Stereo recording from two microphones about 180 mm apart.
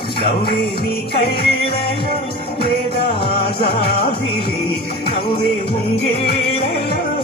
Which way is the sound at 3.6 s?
60° left (ahead or behind).